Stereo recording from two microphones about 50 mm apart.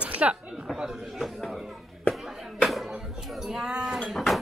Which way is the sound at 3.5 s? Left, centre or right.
Centre.